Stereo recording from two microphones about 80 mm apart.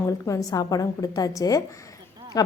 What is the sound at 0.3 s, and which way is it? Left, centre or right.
A woman's voice, left.